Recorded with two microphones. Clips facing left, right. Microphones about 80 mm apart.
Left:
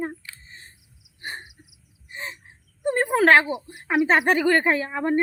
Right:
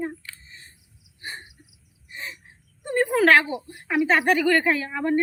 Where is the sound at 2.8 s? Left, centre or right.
Left.